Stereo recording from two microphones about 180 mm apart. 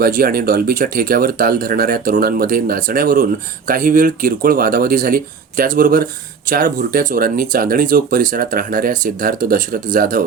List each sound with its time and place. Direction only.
0.0 s speech: 55° right (ahead or behind)